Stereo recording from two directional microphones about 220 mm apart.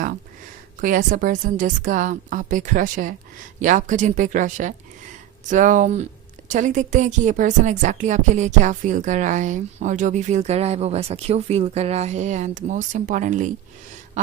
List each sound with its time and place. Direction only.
0.8 s a woman's voice: 35° right (ahead or behind)